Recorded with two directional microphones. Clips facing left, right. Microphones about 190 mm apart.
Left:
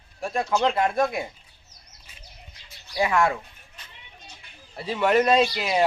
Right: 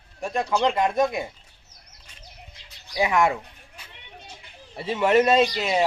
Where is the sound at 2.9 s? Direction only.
15° right (ahead or behind).